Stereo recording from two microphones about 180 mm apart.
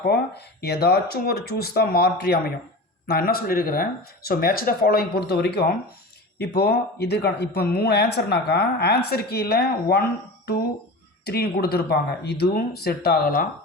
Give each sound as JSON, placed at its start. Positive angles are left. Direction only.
{"t": 0.0, "sound": "speech", "side_deg": 60}
{"t": 11.3, "sound": "speech", "side_deg": 60}